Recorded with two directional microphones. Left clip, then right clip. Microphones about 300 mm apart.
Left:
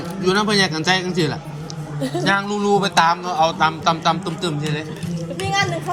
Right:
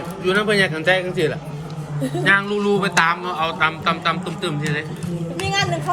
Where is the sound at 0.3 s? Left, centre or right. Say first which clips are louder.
Even; centre.